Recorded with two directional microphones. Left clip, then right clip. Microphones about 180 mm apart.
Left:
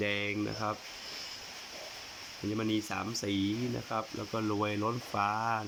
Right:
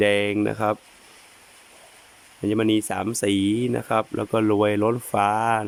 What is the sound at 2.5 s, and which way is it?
Speech, 45° right (ahead or behind).